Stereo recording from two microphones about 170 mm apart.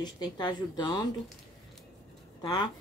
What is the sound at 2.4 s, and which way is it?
Speech, 25° left (ahead or behind).